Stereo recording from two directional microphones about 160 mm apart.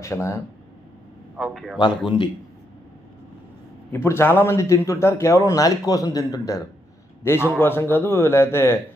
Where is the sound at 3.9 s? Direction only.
15° left (ahead or behind).